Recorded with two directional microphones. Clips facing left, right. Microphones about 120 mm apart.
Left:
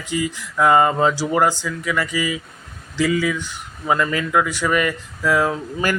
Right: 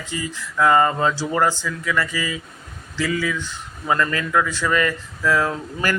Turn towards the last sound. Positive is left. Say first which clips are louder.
# left 2 dB
turn(degrees=15)  # may be behind; listen again after turning